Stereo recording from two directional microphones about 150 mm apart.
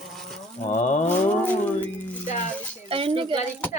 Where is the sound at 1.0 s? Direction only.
10° left (ahead or behind).